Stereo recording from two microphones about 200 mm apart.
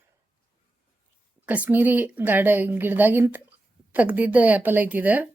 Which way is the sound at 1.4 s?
5° right (ahead or behind).